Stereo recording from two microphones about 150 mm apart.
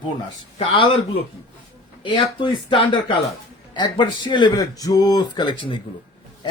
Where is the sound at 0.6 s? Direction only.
35° left (ahead or behind).